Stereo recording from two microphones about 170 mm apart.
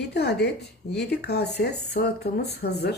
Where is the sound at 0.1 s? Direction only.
75° left (ahead or behind).